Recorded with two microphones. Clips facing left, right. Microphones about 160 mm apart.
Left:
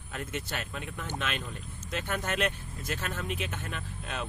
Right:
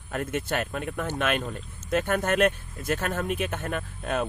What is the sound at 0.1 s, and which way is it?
Speech, 55° right (ahead or behind).